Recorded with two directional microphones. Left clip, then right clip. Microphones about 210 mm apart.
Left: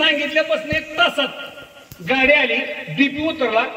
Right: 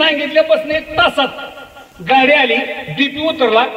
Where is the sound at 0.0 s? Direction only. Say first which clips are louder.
Right 5 dB; 40° right (ahead or behind).